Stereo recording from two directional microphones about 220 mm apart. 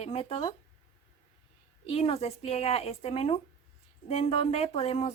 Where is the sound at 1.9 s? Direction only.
25° left (ahead or behind).